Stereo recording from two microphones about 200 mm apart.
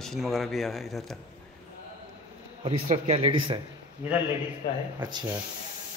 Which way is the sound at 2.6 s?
30° right (ahead or behind).